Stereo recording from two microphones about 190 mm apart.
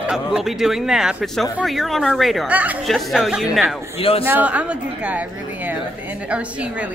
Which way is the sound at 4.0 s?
30° left (ahead or behind).